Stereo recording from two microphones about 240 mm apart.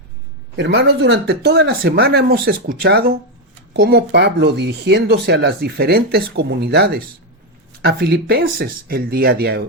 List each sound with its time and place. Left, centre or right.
0.5 s speech: right